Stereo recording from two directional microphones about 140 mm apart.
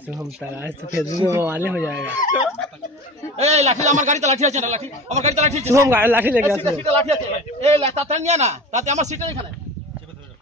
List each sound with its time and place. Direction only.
0.4 s speech: 15° right (ahead or behind)
3.3 s speech: 50° right (ahead or behind)
5.7 s speech: 15° right (ahead or behind)
6.6 s speech: 45° right (ahead or behind)